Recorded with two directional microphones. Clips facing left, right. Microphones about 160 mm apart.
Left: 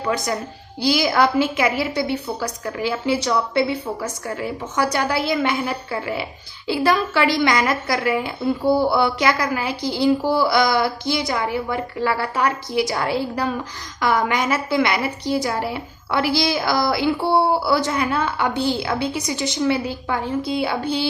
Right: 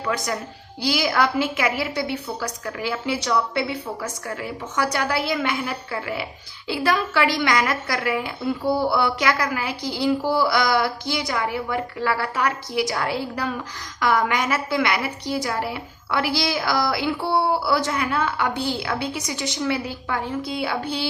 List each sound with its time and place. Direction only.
0.0 s a woman's voice: 25° left (ahead or behind)